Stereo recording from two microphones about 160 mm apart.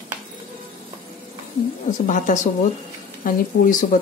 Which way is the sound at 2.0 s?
50° left (ahead or behind).